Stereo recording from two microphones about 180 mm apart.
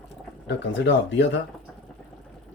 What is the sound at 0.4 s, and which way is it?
Speech, 75° left (ahead or behind).